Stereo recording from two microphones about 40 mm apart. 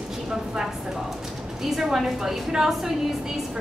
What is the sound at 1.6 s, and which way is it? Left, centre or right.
A woman's voice, centre.